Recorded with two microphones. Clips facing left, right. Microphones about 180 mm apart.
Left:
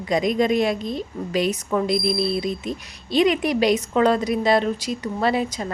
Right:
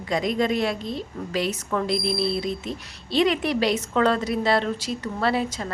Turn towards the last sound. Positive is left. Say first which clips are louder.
# left 2 dB
turn(degrees=15)  # may be behind; listen again after turning